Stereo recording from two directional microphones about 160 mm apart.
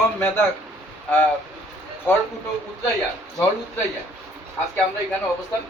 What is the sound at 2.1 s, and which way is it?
Speech, 10° left (ahead or behind).